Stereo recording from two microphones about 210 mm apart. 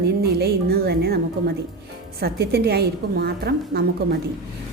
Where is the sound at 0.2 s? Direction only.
50° right (ahead or behind).